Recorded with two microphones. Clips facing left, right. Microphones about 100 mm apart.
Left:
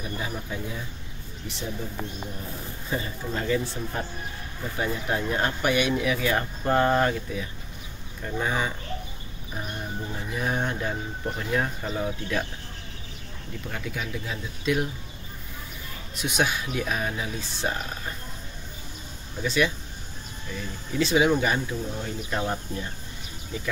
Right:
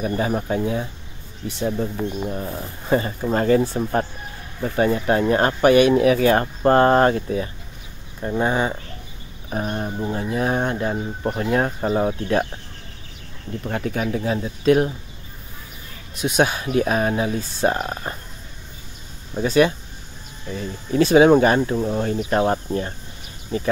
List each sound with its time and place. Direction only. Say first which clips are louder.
0.0 s speech: right 11 dB; 55° right (ahead or behind)
2.2 s speech: right 9 dB; 60° right (ahead or behind); by 8.7 s 35° right (ahead or behind)
9.5 s speech: right 9 dB; 50° right (ahead or behind)
13.7 s speech: right 10 dB; 45° right (ahead or behind)
16.2 s speech: right 7 dB; 40° right (ahead or behind)
19.3 s speech: right 8 dB; 45° right (ahead or behind)
21.7 s speech: right 10 dB; 90° right
22.0 s speech: right 10 dB; 55° right (ahead or behind)